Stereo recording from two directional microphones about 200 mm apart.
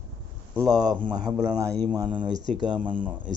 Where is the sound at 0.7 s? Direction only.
20° right (ahead or behind).